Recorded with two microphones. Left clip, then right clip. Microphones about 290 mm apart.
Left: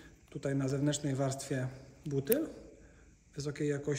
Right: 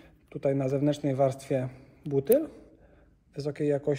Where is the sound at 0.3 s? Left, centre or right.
Centre.